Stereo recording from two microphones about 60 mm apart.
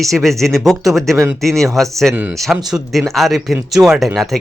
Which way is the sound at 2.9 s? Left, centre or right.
Centre.